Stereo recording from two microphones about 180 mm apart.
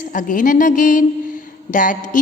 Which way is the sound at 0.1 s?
45° left (ahead or behind).